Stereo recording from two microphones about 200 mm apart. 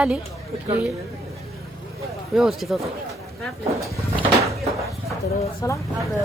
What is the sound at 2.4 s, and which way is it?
Speech, centre (ahead or behind).